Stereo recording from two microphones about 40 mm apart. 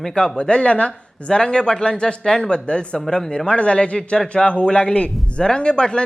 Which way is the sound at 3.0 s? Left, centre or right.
Centre.